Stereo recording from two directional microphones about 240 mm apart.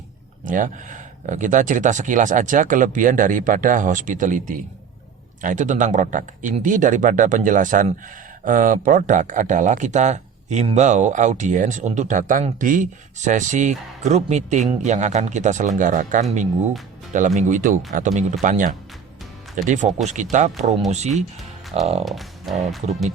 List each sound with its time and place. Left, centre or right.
0.4 s speech: right
22.0 s speech: centre